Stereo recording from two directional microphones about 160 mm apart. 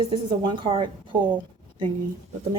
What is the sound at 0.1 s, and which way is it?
A woman's voice, 30° right (ahead or behind).